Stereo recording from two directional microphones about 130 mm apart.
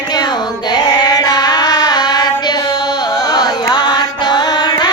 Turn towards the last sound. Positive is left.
turn(degrees=35)  # may be behind; listen again after turning